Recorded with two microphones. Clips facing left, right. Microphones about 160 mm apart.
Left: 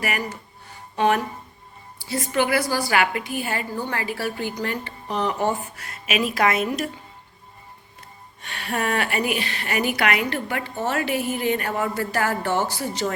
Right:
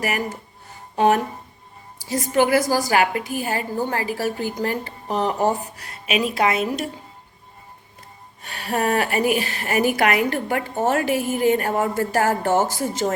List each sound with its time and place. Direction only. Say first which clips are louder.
0.9 s a woman's voice: right 3 dB; 40° right (ahead or behind)
2.0 s music: right 2 dB; 40° right (ahead or behind)
2.3 s a woman's voice: right 4 dB; 40° right (ahead or behind)
8.4 s a woman's voice: right 3 dB; 40° right (ahead or behind)